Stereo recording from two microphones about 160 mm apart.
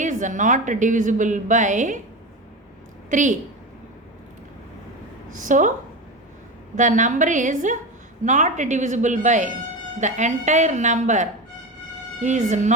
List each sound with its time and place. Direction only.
0.0 s a woman's voice: 50° right (ahead or behind)
3.1 s a woman's voice: 50° right (ahead or behind)
5.3 s a woman's voice: 55° right (ahead or behind)
6.7 s a woman's voice: 50° right (ahead or behind)